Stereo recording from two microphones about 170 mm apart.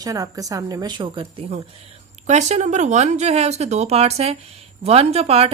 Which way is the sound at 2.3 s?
40° right (ahead or behind).